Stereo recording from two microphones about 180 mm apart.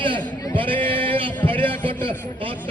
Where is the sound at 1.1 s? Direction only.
30° right (ahead or behind).